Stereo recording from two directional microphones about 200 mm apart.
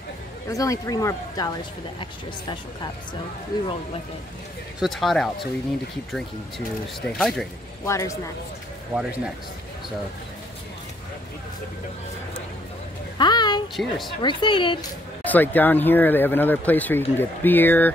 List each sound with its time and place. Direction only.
0.5 s speech: 15° left (ahead or behind)
4.7 s speech: centre (ahead or behind)
7.0 s speech: centre (ahead or behind)
7.8 s speech: 15° left (ahead or behind)
8.9 s speech: 5° right (ahead or behind)
13.2 s a sound: 20° left (ahead or behind)
13.8 s speech: 5° left (ahead or behind)
14.2 s speech: 25° left (ahead or behind)
15.2 s speech: 10° left (ahead or behind)